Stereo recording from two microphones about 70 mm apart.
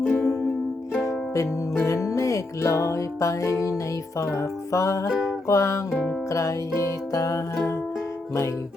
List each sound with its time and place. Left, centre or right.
0.1 s music: centre
1.0 s music: left
5.0 s music: centre
5.5 s music: left